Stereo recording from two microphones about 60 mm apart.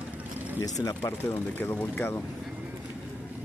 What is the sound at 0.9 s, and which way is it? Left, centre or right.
Speech, left.